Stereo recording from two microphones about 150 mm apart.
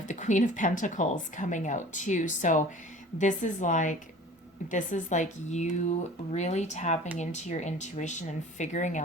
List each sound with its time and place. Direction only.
0.1 s speech: 55° left (ahead or behind)